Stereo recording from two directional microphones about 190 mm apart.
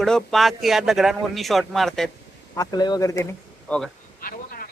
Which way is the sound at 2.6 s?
20° left (ahead or behind).